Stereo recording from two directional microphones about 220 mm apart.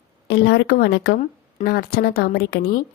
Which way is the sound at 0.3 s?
50° left (ahead or behind).